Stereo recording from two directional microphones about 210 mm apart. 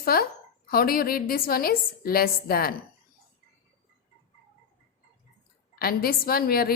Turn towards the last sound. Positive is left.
turn(degrees=45)  # may be behind; listen again after turning